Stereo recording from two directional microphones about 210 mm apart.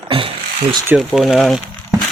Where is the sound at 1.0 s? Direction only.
Centre (ahead or behind).